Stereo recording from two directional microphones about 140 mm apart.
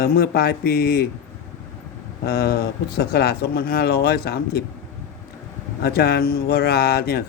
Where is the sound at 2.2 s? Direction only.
90° left.